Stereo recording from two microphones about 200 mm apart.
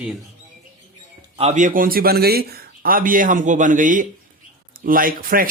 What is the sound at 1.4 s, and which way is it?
Speech, 35° right (ahead or behind).